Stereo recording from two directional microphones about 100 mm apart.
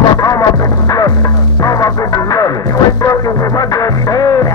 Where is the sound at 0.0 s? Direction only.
40° left (ahead or behind).